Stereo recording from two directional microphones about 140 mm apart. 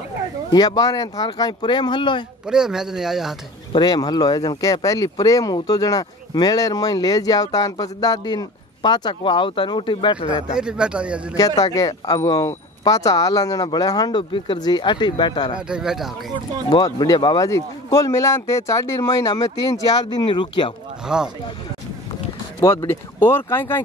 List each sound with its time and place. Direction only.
0.5 s speech: 30° left (ahead or behind)
2.4 s speech: 5° right (ahead or behind)
3.7 s speech: 30° left (ahead or behind)
10.6 s speech: 5° right (ahead or behind)
11.3 s speech: 25° left (ahead or behind)
15.5 s speech: 5° right (ahead or behind)
16.7 s speech: 30° left (ahead or behind)
21.1 s speech: 5° right (ahead or behind)
22.8 s speech: 15° left (ahead or behind)